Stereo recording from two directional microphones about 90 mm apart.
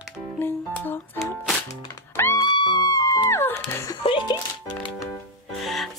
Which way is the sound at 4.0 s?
75° left (ahead or behind).